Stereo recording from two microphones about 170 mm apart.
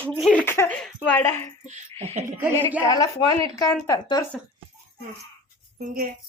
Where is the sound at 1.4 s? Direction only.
40° right (ahead or behind).